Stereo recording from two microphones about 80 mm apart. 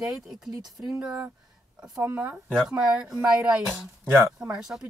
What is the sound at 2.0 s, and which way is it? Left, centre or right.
Speech, right.